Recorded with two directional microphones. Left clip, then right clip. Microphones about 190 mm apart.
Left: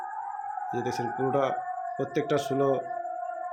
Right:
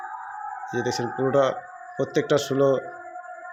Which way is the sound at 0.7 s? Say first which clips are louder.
Right 5 dB; 20° right (ahead or behind).